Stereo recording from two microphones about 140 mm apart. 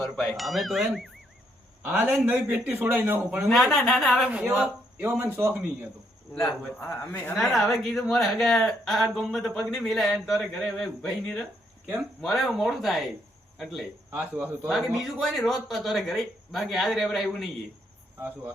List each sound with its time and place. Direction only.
0.0 s speech: centre (ahead or behind)
2.1 s a man's voice: 15° right (ahead or behind)
3.5 s speech: centre (ahead or behind)
4.2 s a man's voice: 10° right (ahead or behind)
4.9 s a man's voice: 15° right (ahead or behind)
6.4 s a man's voice: 15° left (ahead or behind)
7.3 s speech: centre (ahead or behind)
14.1 s a man's voice: 10° right (ahead or behind)
15.0 s speech: centre (ahead or behind)